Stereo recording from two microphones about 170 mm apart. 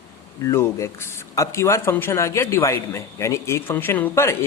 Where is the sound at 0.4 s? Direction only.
15° left (ahead or behind).